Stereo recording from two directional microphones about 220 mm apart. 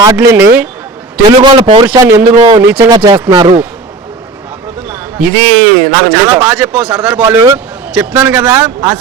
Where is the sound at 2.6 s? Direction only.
10° right (ahead or behind).